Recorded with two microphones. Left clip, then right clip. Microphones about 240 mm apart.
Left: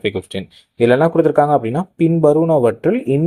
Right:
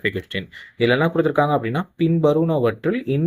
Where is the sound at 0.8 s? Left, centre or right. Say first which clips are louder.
Left 6 dB; left.